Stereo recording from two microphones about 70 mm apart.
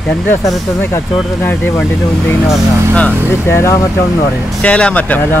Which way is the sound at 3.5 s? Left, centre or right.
Left.